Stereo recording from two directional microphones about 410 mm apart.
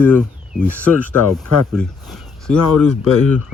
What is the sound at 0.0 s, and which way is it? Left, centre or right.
Speech, centre.